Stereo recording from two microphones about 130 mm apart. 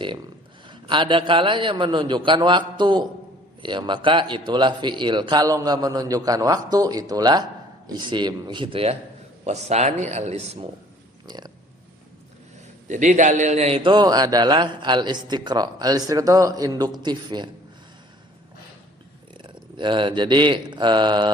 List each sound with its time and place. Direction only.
0.7 s a man's voice: 40° right (ahead or behind)
9.4 s a man's voice: 55° right (ahead or behind)
11.3 s speech: 30° right (ahead or behind)
12.9 s a man's voice: 70° right (ahead or behind); by 13.9 s 50° right (ahead or behind)
13.9 s a man's voice: 30° right (ahead or behind)
19.4 s speech: 40° right (ahead or behind)